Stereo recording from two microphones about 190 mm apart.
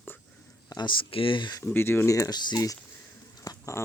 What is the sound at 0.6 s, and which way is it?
Speech, 25° left (ahead or behind).